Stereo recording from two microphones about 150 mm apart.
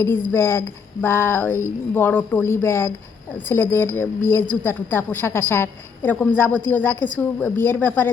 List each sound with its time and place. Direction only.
0.0 s a woman's voice: 15° left (ahead or behind)